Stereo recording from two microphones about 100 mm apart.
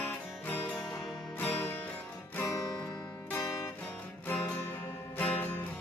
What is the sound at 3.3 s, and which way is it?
Music, 30° left (ahead or behind).